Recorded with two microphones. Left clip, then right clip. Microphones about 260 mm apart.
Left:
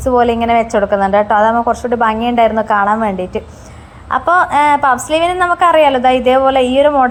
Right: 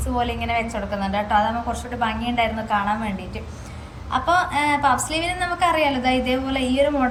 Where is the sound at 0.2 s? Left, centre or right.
Left.